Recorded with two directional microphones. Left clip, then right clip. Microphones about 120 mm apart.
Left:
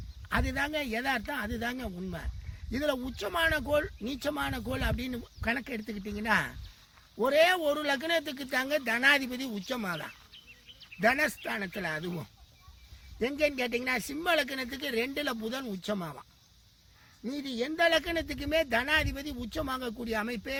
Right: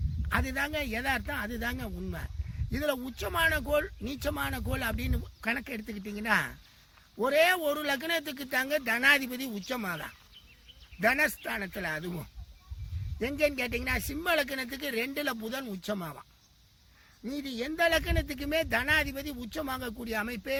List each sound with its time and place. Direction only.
0.3 s speech: 30° right (ahead or behind)
17.2 s speech: 30° right (ahead or behind)